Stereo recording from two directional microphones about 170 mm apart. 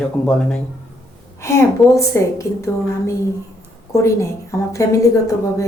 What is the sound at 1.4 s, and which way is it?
A woman's voice, 15° left (ahead or behind).